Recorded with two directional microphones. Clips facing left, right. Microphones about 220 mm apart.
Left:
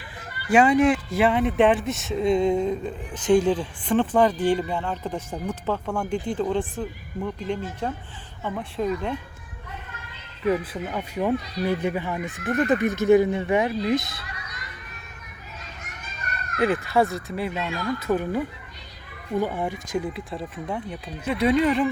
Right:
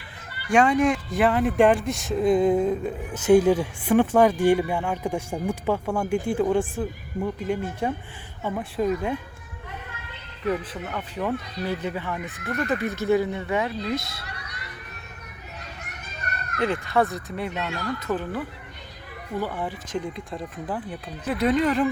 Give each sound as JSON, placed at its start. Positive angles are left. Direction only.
{"t": 0.5, "sound": "speech", "side_deg": 0}
{"t": 10.5, "sound": "speech", "side_deg": 10}
{"t": 16.6, "sound": "speech", "side_deg": 5}